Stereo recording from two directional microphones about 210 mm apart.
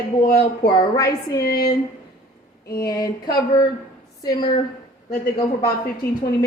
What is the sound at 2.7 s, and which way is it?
A woman's voice, 15° left (ahead or behind).